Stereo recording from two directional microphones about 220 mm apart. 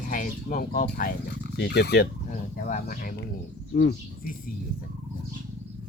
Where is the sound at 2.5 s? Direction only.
35° left (ahead or behind).